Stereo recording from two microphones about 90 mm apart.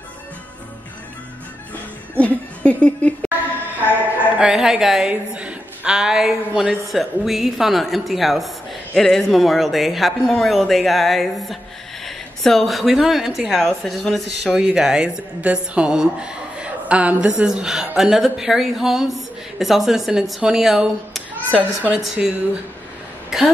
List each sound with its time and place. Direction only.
2.1 s speech: 15° left (ahead or behind)
4.4 s a woman's voice: 5° right (ahead or behind)
21.5 s a woman's voice: 20° right (ahead or behind)
23.3 s a woman's voice: 5° right (ahead or behind)